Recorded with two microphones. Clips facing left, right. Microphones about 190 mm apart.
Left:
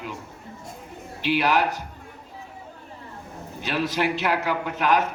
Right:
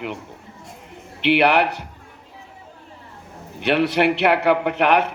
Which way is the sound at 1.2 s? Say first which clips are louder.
Right 5 dB; 65° right (ahead or behind).